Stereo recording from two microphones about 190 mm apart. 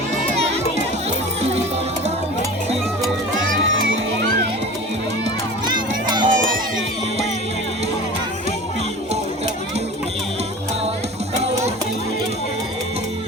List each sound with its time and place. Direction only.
3.6 s music: 90° right
5.6 s music: 25° right (ahead or behind)